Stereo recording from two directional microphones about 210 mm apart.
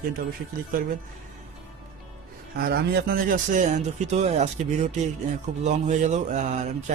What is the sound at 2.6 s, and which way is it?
A man's voice, 50° right (ahead or behind).